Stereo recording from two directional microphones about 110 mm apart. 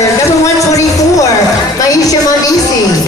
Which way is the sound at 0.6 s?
30° left (ahead or behind).